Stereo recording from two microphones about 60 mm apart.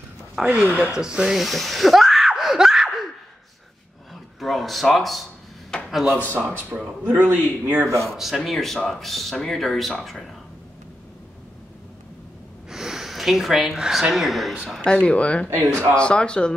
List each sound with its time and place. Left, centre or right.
0.4 s speech: centre
0.9 s laughter: centre
4.1 s speech: centre
5.7 s a sound: centre
6.3 s speech: right
8.1 s speech: centre
12.6 s speech: centre
14.9 s speech: centre
15.5 s a man's voice: right
16.0 s speech: centre